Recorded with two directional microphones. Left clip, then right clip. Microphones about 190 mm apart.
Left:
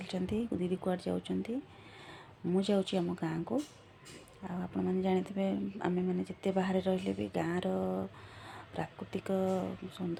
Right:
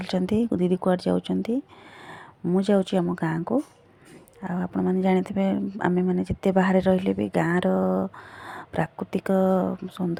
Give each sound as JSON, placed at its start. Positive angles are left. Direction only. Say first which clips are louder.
{"t": 0.0, "sound": "speech", "louder": "right 11 dB", "side_deg": -40}